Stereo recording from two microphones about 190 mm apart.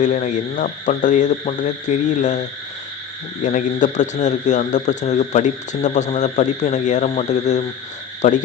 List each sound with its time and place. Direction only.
0.0 s speech: 40° left (ahead or behind)
3.4 s speech: 40° left (ahead or behind)